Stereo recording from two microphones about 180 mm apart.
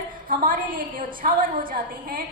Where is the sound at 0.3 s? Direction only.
50° right (ahead or behind).